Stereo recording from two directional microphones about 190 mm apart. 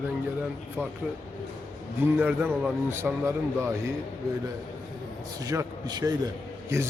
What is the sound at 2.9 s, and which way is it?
Speech, 15° right (ahead or behind).